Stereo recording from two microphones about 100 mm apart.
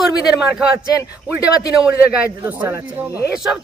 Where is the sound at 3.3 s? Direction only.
5° right (ahead or behind).